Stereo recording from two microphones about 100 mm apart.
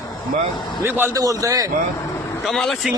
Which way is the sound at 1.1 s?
35° right (ahead or behind).